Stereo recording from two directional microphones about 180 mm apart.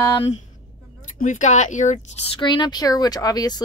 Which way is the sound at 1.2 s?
45° left (ahead or behind).